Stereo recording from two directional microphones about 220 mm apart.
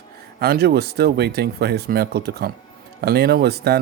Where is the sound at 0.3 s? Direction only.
45° right (ahead or behind).